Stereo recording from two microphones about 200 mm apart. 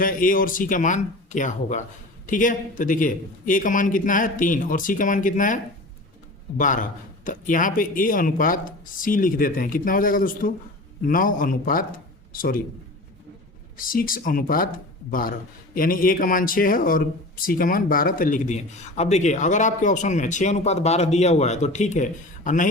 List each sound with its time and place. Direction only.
0.0 s a man's voice: 45° left (ahead or behind)
6.6 s a man's voice: 40° left (ahead or behind)
13.7 s a man's voice: 45° left (ahead or behind)